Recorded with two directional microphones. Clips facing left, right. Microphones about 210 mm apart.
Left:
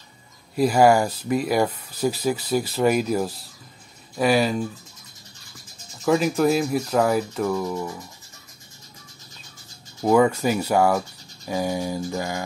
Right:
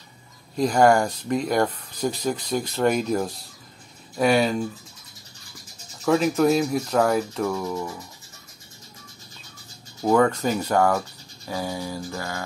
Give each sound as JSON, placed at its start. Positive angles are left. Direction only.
{"t": 0.6, "sound": "speech", "side_deg": 5}
{"t": 6.0, "sound": "speech", "side_deg": 0}
{"t": 10.0, "sound": "speech", "side_deg": 10}